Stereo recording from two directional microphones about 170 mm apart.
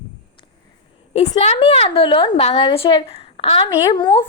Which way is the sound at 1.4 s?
35° left (ahead or behind).